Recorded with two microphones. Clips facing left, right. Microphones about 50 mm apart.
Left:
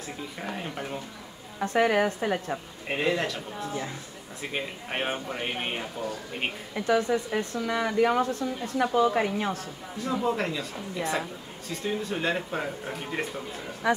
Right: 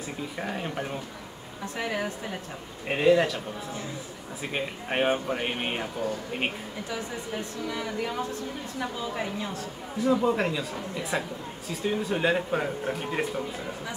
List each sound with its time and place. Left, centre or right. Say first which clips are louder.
0.4 s speech: right 2 dB; centre
1.6 s a woman's voice: left 8 dB; left
2.9 s speech: right 5 dB; centre
6.9 s a woman's voice: left 11 dB; left
10.0 s speech: right 3 dB; centre
13.9 s a woman's voice: left 17 dB; left